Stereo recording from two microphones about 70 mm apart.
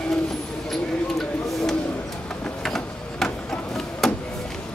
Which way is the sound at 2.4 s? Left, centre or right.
Centre.